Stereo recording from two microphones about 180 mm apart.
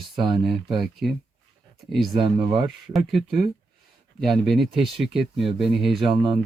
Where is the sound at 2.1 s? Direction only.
30° right (ahead or behind).